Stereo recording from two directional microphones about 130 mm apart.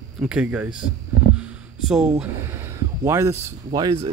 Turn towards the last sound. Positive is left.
turn(degrees=-30)  # may be behind; listen again after turning